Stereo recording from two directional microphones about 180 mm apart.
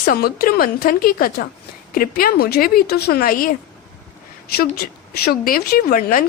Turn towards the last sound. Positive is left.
turn(degrees=55)  # may be behind; listen again after turning